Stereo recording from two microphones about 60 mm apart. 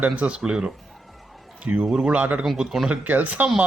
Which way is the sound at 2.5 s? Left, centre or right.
Centre.